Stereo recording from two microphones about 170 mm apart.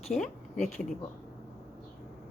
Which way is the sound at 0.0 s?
Centre (ahead or behind).